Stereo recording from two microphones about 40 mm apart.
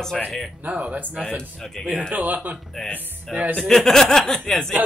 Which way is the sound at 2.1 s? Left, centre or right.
Right.